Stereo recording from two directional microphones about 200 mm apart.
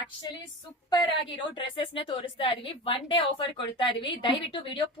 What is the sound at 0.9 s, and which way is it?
A woman's voice, 20° left (ahead or behind).